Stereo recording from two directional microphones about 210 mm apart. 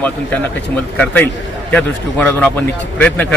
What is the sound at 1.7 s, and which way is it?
A man's voice, 5° left (ahead or behind).